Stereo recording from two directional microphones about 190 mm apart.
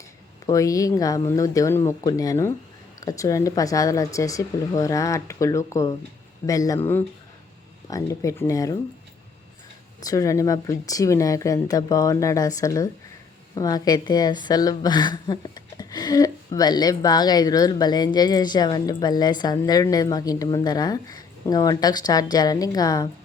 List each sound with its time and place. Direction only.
0.4 s speech: 15° left (ahead or behind)
7.9 s speech: 15° left (ahead or behind)
10.0 s a woman's voice: 20° left (ahead or behind)